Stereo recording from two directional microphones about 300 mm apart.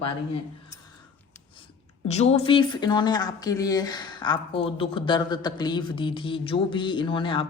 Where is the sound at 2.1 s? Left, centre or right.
Left.